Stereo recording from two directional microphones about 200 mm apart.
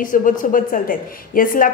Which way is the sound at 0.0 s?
40° left (ahead or behind).